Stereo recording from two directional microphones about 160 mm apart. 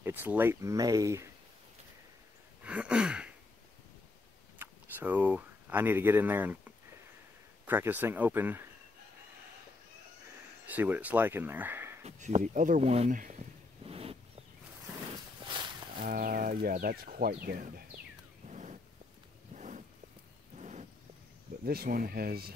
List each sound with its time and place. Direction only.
0.0 s speech: 10° right (ahead or behind)
2.6 s sigh: 5° right (ahead or behind)
4.6 s speech: 10° right (ahead or behind)
7.6 s speech: 10° right (ahead or behind)
10.7 s speech: 10° right (ahead or behind)
12.0 s speech: 45° right (ahead or behind)
13.1 s a sound: 55° right (ahead or behind)
16.0 s speech: 65° right (ahead or behind)
18.5 s vehicle: 50° right (ahead or behind)
19.5 s a sound: 50° right (ahead or behind)
21.6 s speech: 65° right (ahead or behind)